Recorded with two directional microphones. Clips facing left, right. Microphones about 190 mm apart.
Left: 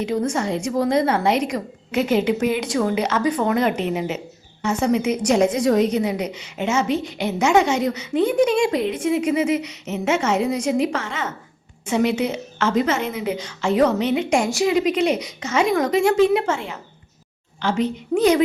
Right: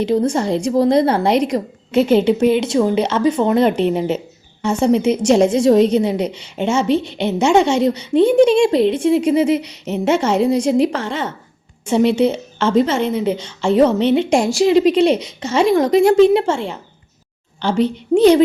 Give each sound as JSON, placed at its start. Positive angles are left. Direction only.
{"t": 0.0, "sound": "a woman's voice", "side_deg": -35}